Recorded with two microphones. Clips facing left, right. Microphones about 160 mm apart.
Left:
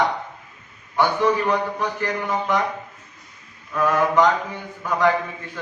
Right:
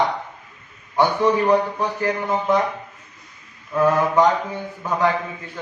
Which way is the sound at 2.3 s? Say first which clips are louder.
Right 3 dB; 25° right (ahead or behind).